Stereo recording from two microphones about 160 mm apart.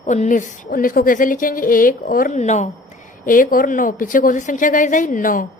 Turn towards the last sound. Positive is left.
turn(degrees=60)  # may be behind; listen again after turning